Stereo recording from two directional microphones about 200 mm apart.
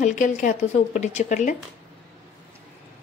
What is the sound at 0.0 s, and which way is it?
Speech, 40° left (ahead or behind).